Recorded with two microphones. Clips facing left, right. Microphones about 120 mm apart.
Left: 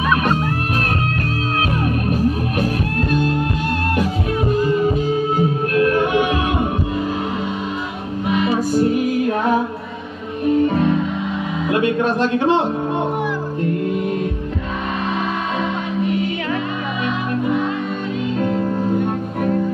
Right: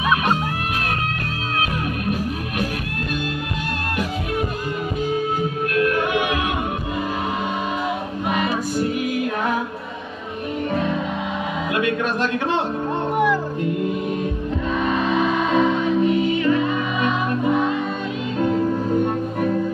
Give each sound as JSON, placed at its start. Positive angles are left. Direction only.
{"t": 2.0, "sound": "music", "side_deg": 35}
{"t": 5.8, "sound": "music", "side_deg": 30}
{"t": 11.7, "sound": "music", "side_deg": 25}